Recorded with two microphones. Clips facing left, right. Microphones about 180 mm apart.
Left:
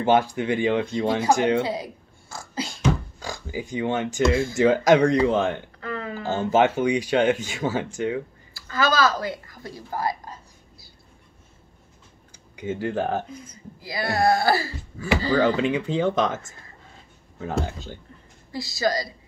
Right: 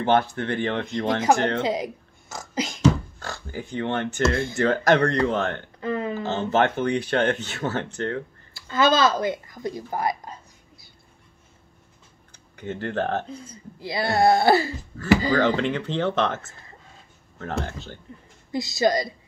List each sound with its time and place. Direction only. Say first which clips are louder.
0.0 s speech: left 1 dB; 10° left (ahead or behind)
1.6 s speech: right 1 dB; 20° right (ahead or behind)
3.2 s speech: left 2 dB; 10° left (ahead or behind)
5.8 s a sound: right 5 dB; 20° right (ahead or behind)
6.2 s speech: left 3 dB; 10° left (ahead or behind)
8.5 s speech: right 2 dB; 25° right (ahead or behind)
12.5 s speech: left 1 dB; 10° left (ahead or behind)
13.3 s speech: right 2 dB; 30° right (ahead or behind)
14.9 s speech: right 2 dB; centre (ahead or behind)
17.4 s speech: left 2 dB; 10° left (ahead or behind)
18.5 s speech: right 3 dB; 20° right (ahead or behind)